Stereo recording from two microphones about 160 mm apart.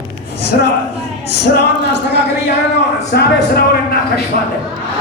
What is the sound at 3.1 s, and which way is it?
Speech, 75° left (ahead or behind).